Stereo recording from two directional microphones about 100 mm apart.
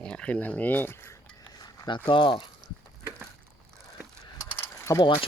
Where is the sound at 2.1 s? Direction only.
60° left (ahead or behind).